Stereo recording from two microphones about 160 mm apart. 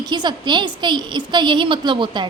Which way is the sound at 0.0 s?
25° right (ahead or behind).